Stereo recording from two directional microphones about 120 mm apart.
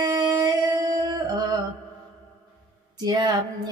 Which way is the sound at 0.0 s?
35° right (ahead or behind).